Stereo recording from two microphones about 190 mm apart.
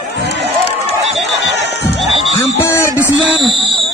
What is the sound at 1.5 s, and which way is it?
Crowd, 60° left (ahead or behind).